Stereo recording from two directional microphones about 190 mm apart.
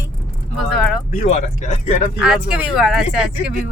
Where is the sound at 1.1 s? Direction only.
35° left (ahead or behind).